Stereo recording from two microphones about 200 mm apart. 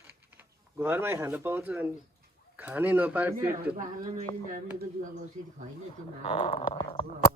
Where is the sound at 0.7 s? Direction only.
10° right (ahead or behind).